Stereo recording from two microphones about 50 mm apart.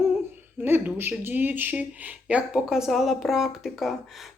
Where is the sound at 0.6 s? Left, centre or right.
Right.